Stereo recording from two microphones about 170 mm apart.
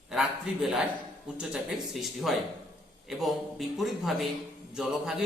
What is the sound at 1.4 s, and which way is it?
A man's voice, 5° right (ahead or behind).